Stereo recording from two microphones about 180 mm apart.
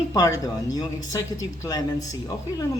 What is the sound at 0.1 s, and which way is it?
Speech, 20° left (ahead or behind).